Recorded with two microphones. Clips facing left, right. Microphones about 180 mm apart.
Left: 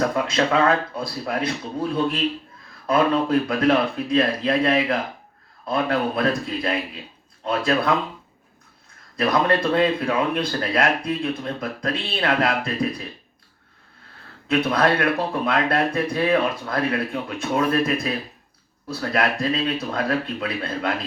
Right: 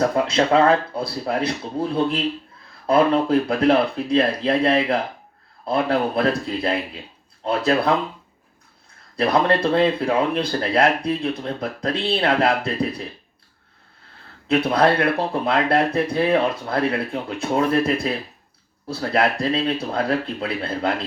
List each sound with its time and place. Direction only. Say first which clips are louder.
0.3 s speech: right 4 dB; 30° right (ahead or behind)
9.1 s speech: right 2 dB; 30° right (ahead or behind)
14.5 s speech: right 2 dB; 30° right (ahead or behind)
18.9 s speech: right 2 dB; 30° right (ahead or behind)